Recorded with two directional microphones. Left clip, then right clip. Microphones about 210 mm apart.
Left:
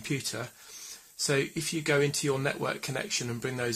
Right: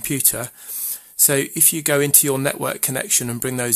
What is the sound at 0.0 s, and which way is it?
Speech, 45° right (ahead or behind).